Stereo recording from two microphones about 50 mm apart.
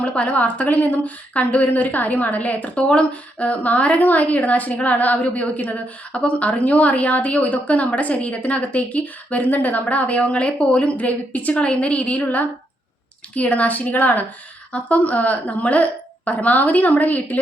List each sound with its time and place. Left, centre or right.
0.0 s a woman's voice: left